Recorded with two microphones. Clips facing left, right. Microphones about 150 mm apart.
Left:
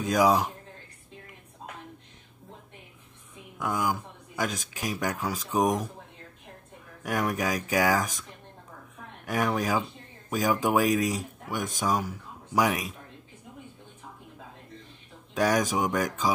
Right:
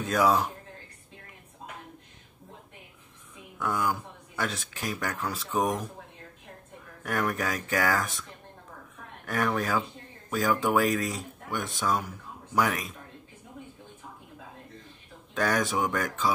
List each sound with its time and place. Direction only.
0.1 s speech: 10° left (ahead or behind)
3.5 s speech: 10° left (ahead or behind)
7.0 s speech: 10° left (ahead or behind)
9.2 s speech: 10° left (ahead or behind)
15.3 s speech: 15° left (ahead or behind)